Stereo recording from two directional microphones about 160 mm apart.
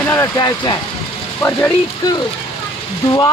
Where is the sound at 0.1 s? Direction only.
20° left (ahead or behind).